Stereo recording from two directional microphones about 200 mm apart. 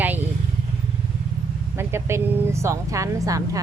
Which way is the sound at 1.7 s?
15° right (ahead or behind).